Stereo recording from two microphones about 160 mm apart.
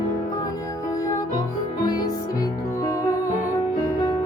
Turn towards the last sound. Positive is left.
turn(degrees=20)  # may be behind; listen again after turning